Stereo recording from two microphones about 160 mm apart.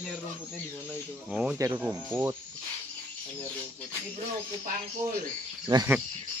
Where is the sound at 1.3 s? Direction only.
5° right (ahead or behind).